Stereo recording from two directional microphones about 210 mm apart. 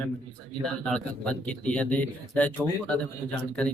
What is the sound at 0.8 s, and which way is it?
A man's voice, 5° left (ahead or behind).